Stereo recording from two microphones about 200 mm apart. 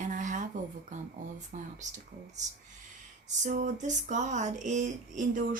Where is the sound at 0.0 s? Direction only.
40° right (ahead or behind).